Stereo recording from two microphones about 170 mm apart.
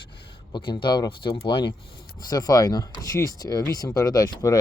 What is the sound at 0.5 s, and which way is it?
Speech, 30° left (ahead or behind).